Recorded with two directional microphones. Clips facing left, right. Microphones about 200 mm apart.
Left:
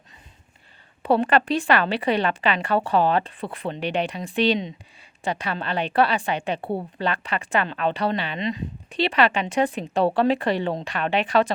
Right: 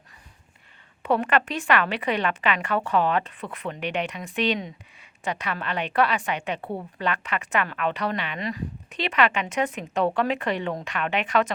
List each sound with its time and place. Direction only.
1.0 s a woman's voice: 30° left (ahead or behind)